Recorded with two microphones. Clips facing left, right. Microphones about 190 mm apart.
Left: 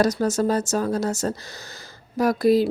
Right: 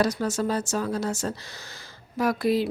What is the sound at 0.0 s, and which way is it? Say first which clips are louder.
Speech: left 4 dB; 40° left (ahead or behind).